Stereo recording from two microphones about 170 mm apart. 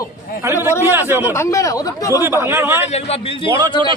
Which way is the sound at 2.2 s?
15° right (ahead or behind).